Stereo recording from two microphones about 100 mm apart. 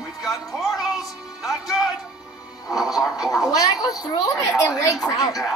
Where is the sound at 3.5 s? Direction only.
35° left (ahead or behind).